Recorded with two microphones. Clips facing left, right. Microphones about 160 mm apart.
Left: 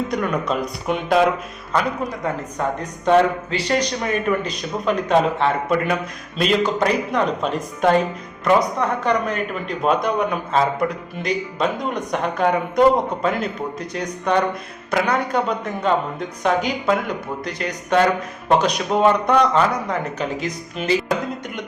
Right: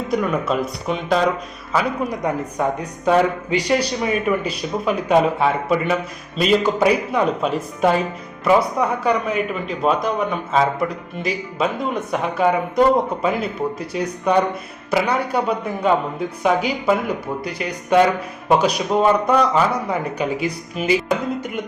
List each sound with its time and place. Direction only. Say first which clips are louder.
0.1 s speech: right 2 dB; 5° right (ahead or behind)
2.2 s a man's voice: right 2 dB; 20° right (ahead or behind)